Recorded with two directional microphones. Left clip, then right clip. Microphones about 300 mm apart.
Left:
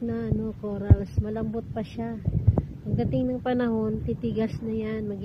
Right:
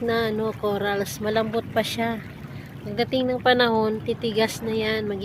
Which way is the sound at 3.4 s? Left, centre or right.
Centre.